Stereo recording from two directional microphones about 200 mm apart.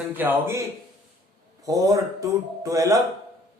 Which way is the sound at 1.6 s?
15° right (ahead or behind).